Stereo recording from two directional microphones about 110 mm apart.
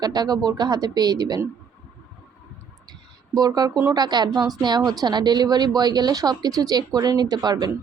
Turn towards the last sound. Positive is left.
turn(degrees=-40)  # may be behind; listen again after turning